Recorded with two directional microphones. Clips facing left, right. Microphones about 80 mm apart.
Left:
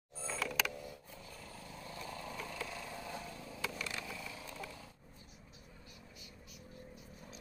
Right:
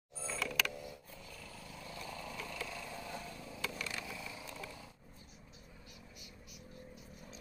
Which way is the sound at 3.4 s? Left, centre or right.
Centre.